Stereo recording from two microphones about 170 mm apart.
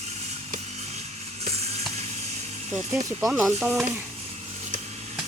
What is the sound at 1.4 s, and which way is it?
Sizzle, 40° right (ahead or behind).